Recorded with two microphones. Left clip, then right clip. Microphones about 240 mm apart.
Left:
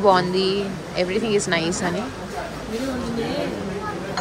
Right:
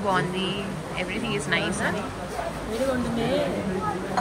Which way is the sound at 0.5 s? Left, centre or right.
Left.